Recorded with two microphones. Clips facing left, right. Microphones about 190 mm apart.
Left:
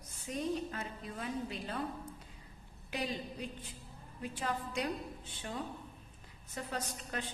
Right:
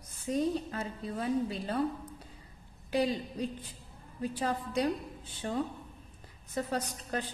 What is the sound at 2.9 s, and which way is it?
A woman's voice, 35° right (ahead or behind).